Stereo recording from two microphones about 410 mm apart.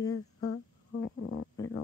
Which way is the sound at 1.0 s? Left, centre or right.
Left.